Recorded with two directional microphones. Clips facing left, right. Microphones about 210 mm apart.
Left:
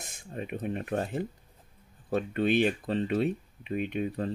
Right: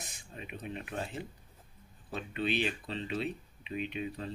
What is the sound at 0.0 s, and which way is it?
Speech, 50° left (ahead or behind).